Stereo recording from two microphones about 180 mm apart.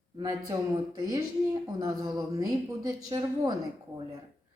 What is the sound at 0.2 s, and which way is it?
Speech, 20° right (ahead or behind).